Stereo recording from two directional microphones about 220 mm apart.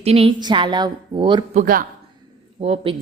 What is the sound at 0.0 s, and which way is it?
A woman's voice, 25° right (ahead or behind).